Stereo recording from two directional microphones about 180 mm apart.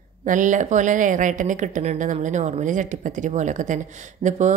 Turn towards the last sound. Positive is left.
turn(degrees=-40)  # may be behind; listen again after turning